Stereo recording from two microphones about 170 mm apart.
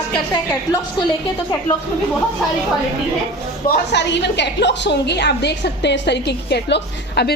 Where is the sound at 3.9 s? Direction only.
90° left.